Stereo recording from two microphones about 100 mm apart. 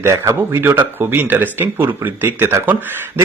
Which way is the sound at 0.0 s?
25° right (ahead or behind).